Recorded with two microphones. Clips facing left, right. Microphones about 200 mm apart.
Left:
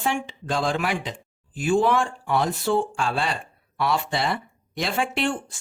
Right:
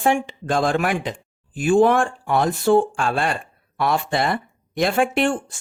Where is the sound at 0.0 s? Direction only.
50° right (ahead or behind).